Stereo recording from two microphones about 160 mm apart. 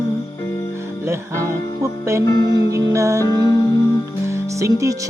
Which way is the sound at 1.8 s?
15° right (ahead or behind).